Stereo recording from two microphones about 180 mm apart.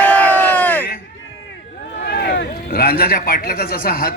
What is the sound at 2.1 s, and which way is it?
A man's voice, 60° left (ahead or behind).